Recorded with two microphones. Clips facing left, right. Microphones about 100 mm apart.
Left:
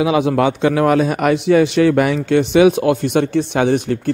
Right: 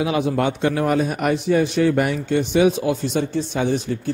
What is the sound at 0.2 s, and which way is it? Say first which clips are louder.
A man's voice: left 5 dB; 90° left.